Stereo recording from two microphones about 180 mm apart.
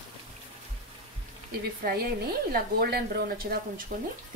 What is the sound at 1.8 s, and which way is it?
Speech, 55° right (ahead or behind).